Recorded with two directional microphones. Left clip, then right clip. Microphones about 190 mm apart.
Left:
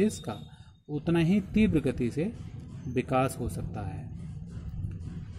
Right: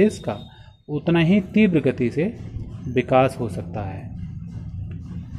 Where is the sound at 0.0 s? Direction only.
15° left (ahead or behind).